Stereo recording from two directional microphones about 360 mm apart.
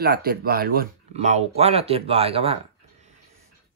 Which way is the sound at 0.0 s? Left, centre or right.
Right.